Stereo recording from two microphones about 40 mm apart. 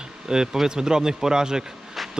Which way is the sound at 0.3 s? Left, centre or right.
Centre.